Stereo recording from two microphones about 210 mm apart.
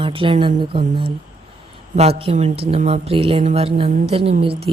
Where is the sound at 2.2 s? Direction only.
30° right (ahead or behind).